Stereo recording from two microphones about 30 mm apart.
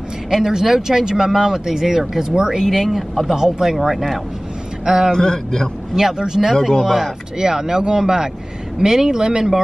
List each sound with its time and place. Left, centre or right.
0.3 s speech: right
3.0 s speech: centre
3.6 s speech: right
4.8 s speech: right
5.1 s a man's voice: left
5.9 s speech: centre